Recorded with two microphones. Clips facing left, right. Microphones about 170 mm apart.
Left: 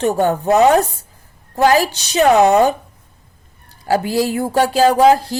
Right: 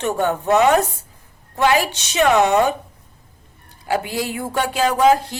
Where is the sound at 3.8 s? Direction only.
40° left (ahead or behind).